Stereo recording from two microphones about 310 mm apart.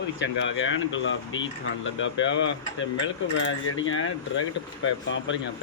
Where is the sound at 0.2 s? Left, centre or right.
Left.